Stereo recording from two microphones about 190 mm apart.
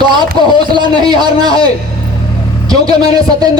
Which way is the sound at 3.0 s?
20° right (ahead or behind).